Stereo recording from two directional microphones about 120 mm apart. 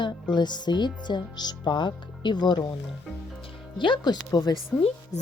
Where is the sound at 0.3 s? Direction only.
35° left (ahead or behind).